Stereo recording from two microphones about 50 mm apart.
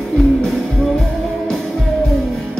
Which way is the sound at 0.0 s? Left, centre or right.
Centre.